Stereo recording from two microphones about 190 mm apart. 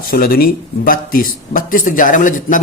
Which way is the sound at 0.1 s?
50° left (ahead or behind).